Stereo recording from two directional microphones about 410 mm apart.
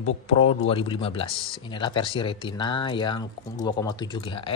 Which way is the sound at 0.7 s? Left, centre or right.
Centre.